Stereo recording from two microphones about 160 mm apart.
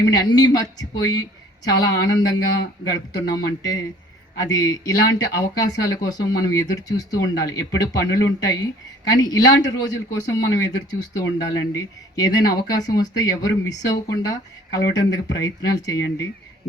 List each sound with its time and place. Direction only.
0.0 s speech: 25° left (ahead or behind)